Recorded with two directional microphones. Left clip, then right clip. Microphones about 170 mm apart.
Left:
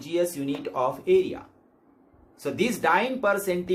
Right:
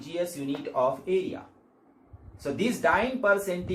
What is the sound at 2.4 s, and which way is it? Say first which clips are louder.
Speech: left 1 dB; 45° left (ahead or behind).